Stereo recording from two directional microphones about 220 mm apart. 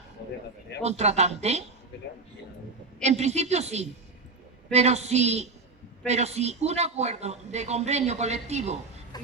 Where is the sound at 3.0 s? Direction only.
30° right (ahead or behind).